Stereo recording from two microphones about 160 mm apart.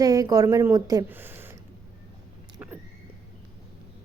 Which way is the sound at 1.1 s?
10° right (ahead or behind).